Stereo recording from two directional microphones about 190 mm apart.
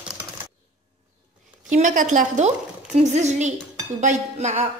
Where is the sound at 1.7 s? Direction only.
45° right (ahead or behind).